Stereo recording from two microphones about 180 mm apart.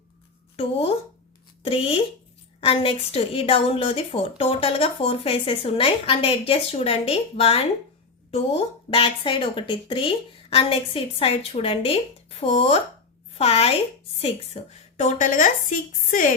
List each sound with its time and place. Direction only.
0.5 s a woman's voice: 30° left (ahead or behind)